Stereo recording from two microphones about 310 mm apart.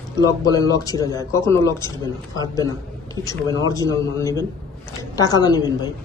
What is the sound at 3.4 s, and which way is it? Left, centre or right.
Speech, centre.